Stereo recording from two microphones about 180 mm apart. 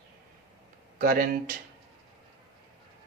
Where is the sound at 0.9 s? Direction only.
55° right (ahead or behind).